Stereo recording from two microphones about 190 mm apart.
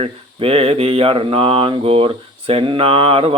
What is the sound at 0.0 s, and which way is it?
Speech, 30° right (ahead or behind).